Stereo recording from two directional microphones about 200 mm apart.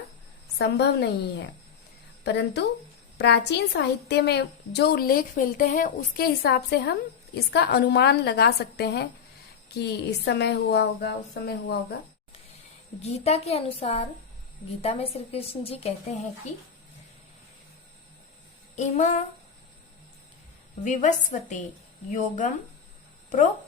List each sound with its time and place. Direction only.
0.6 s a woman's voice: 55° left (ahead or behind)
13.0 s a woman's voice: 30° left (ahead or behind)
18.8 s a woman's voice: 40° left (ahead or behind)
20.8 s a woman's voice: 40° left (ahead or behind)